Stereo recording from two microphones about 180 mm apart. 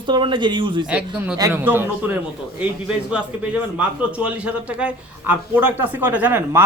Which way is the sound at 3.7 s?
5° right (ahead or behind).